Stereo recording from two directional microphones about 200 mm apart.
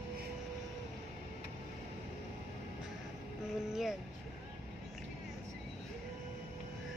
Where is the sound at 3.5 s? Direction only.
Centre (ahead or behind).